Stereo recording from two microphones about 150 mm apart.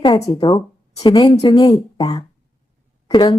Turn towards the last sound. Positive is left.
turn(degrees=30)  # may be behind; listen again after turning